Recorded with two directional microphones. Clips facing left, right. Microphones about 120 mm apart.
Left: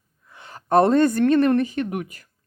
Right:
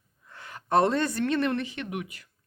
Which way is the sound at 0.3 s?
25° left (ahead or behind).